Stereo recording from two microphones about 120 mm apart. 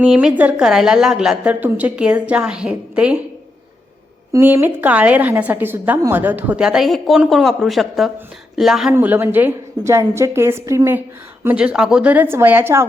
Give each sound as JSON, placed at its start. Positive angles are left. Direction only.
{"t": 0.0, "sound": "a woman's voice", "side_deg": -5}
{"t": 4.3, "sound": "a woman's voice", "side_deg": -25}
{"t": 8.9, "sound": "a woman's voice", "side_deg": -15}
{"t": 11.4, "sound": "a woman's voice", "side_deg": -10}